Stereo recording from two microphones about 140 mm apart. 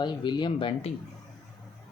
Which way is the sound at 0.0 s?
35° left (ahead or behind).